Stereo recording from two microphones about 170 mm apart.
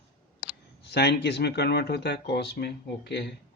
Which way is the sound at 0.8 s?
75° left (ahead or behind).